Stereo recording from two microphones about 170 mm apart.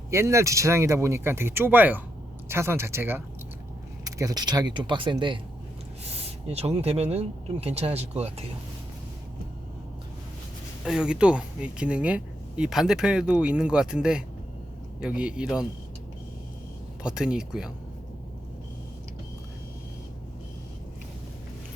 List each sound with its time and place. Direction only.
0.1 s speech: 15° right (ahead or behind); by 8.4 s 40° right (ahead or behind)
10.8 s speech: 5° right (ahead or behind)
17.0 s speech: 5° right (ahead or behind)